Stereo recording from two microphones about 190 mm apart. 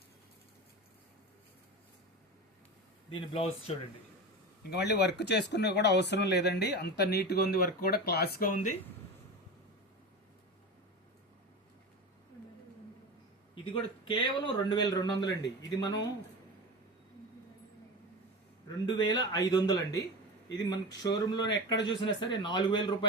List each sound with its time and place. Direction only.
3.1 s speech: 30° left (ahead or behind)
4.7 s speech: 60° left (ahead or behind)
14.0 s a man's voice: 25° left (ahead or behind)
19.0 s a man's voice: 20° left (ahead or behind)